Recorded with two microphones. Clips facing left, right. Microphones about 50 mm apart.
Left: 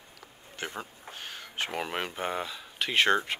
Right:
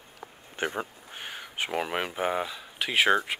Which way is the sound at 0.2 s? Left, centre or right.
Right.